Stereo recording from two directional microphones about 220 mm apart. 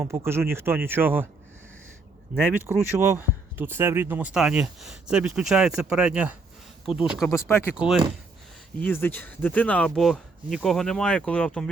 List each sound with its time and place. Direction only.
0.3 s speech: 10° right (ahead or behind)
2.3 s speech: 5° right (ahead or behind)
6.8 s speech: 25° left (ahead or behind)
7.1 s speech: centre (ahead or behind)
8.8 s speech: 10° left (ahead or behind)